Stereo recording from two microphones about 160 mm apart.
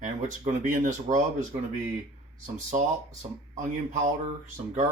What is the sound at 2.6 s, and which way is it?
Speech, 50° right (ahead or behind).